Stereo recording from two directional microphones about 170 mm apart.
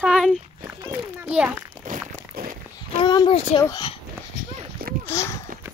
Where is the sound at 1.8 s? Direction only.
50° right (ahead or behind).